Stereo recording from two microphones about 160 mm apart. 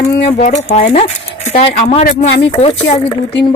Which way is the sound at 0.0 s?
45° left (ahead or behind).